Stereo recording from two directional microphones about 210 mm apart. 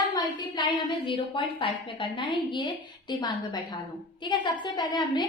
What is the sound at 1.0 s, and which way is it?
A woman's voice, 25° left (ahead or behind).